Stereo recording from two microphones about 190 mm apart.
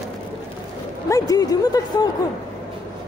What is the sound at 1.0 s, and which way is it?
A woman's voice, 15° left (ahead or behind).